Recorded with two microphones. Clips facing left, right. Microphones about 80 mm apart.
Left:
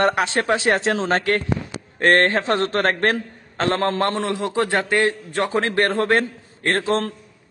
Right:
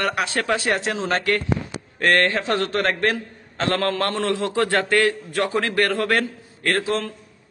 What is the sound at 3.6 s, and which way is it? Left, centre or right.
A man's voice, left.